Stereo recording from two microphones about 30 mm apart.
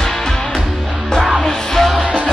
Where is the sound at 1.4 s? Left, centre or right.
Centre.